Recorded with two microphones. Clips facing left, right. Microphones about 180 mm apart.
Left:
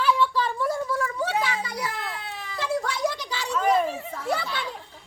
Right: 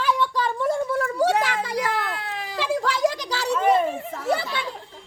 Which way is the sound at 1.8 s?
60° right (ahead or behind).